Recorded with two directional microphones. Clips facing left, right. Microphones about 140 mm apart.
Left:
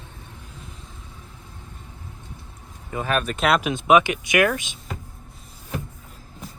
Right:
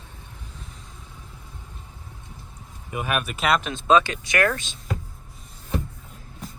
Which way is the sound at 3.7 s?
20° left (ahead or behind).